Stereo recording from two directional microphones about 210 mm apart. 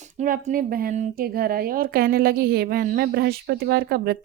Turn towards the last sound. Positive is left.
turn(degrees=-50)  # may be behind; listen again after turning